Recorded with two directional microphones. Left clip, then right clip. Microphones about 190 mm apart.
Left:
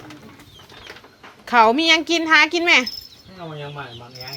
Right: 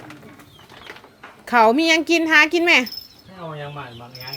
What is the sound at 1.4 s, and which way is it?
Speech, 20° right (ahead or behind).